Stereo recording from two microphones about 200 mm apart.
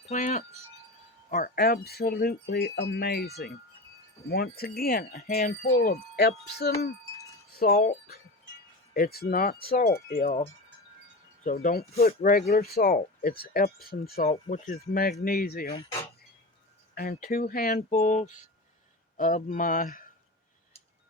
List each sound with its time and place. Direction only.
0.1 s speech: 35° left (ahead or behind)
8.9 s speech: 50° left (ahead or behind)
11.4 s speech: 45° left (ahead or behind)
16.9 s speech: 45° left (ahead or behind)